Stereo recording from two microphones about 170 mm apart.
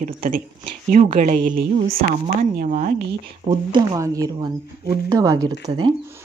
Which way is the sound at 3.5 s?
25° right (ahead or behind).